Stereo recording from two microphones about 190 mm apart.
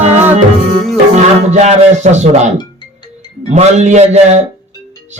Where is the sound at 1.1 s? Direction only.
35° right (ahead or behind).